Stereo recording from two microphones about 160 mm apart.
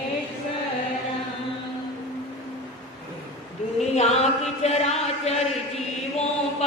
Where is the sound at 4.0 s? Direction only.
45° left (ahead or behind).